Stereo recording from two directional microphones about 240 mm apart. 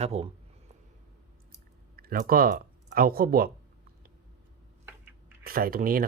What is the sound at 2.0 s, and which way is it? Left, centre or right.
Speech, right.